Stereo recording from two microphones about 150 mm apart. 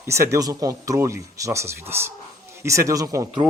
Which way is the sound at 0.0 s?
20° right (ahead or behind).